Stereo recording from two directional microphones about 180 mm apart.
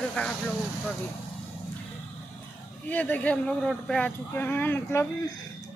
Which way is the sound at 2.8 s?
10° left (ahead or behind).